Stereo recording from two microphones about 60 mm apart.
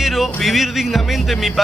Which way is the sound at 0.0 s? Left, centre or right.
Centre.